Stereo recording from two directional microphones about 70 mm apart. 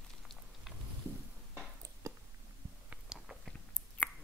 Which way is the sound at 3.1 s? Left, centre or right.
Centre.